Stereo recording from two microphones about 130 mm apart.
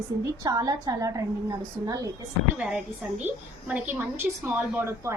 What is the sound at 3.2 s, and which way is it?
A woman's voice, 10° right (ahead or behind).